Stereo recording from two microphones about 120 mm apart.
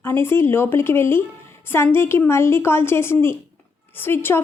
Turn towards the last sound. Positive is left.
turn(degrees=20)  # may be behind; listen again after turning